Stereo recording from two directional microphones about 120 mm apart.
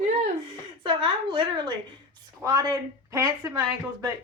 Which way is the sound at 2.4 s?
30° right (ahead or behind).